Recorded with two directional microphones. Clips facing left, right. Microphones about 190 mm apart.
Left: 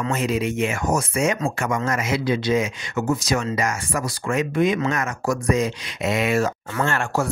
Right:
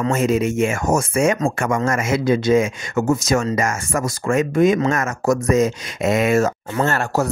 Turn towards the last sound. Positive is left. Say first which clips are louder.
# right 3 dB
turn(degrees=-40)  # may be behind; listen again after turning